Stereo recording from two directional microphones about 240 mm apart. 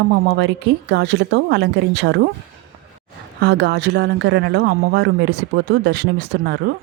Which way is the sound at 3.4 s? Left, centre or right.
Right.